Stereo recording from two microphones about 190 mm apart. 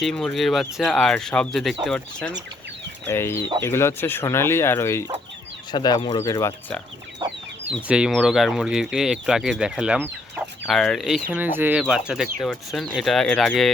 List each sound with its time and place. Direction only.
0.0 s speech: 5° left (ahead or behind)
3.1 s speech: 15° left (ahead or behind)
7.7 s speech: 5° right (ahead or behind)
10.7 s speech: centre (ahead or behind)